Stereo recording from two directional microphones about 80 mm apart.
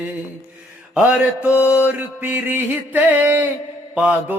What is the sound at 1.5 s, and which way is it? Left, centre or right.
Mantra, left.